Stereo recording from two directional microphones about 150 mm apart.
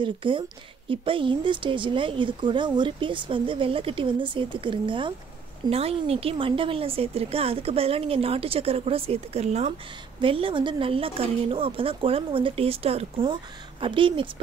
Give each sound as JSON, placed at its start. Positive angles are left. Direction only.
{"t": 0.0, "sound": "a woman's voice", "side_deg": -35}